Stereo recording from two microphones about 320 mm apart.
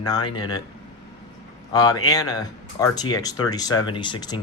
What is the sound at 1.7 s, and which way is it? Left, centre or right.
Speech, centre.